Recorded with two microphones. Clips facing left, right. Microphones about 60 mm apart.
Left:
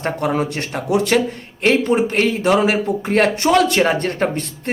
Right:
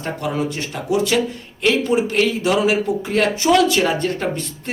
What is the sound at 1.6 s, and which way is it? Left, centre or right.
A man's voice, left.